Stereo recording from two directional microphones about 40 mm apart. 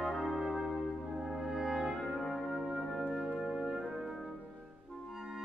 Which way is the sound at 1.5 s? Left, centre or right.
Centre.